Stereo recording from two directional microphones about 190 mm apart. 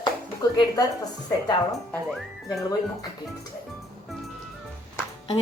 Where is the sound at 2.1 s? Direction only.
Centre (ahead or behind).